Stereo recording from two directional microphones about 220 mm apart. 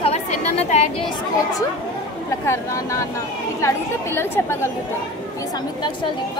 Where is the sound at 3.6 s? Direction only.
10° left (ahead or behind).